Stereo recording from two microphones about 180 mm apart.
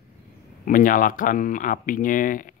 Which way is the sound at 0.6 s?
50° left (ahead or behind).